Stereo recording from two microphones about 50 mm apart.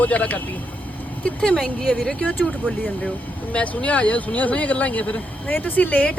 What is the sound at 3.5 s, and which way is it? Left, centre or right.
Speech, left.